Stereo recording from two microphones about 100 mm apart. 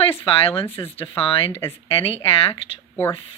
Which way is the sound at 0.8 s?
65° left (ahead or behind).